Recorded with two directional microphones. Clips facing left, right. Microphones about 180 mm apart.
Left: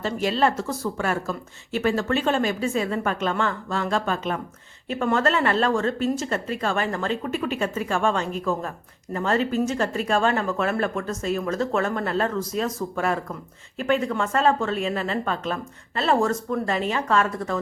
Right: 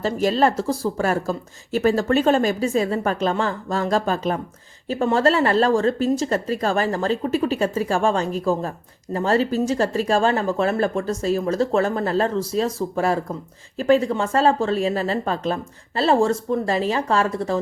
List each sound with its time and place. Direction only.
0.0 s speech: 40° right (ahead or behind)